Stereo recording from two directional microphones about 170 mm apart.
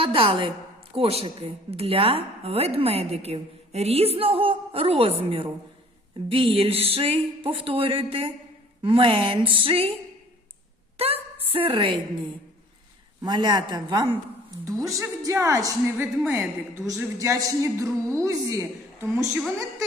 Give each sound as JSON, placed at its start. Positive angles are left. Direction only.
{"t": 0.0, "sound": "a woman's voice", "side_deg": -30}
{"t": 6.3, "sound": "a woman's voice", "side_deg": -35}
{"t": 10.9, "sound": "a sound", "side_deg": -35}
{"t": 13.2, "sound": "a woman's voice", "side_deg": -25}